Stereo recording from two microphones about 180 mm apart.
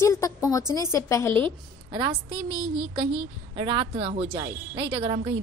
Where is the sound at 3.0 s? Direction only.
30° right (ahead or behind).